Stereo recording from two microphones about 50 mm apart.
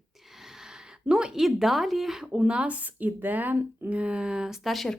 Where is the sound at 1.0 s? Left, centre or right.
Centre.